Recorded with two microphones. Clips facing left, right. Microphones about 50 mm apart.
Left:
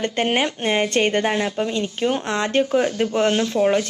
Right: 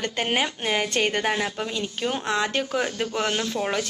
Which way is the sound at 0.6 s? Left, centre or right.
Left.